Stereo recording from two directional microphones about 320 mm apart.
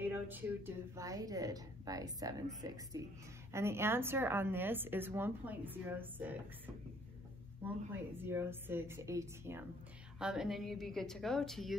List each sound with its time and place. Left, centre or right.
0.0 s a woman's voice: centre